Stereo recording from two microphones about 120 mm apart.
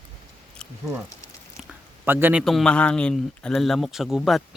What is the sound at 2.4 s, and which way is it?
Speech, centre (ahead or behind).